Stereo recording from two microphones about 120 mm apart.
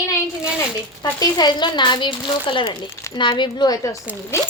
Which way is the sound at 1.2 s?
35° left (ahead or behind).